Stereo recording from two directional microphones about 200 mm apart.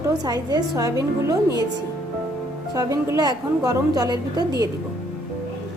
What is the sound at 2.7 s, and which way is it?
A woman's voice, 15° right (ahead or behind).